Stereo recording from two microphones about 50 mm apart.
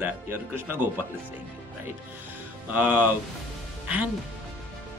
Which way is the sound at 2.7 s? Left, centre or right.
Right.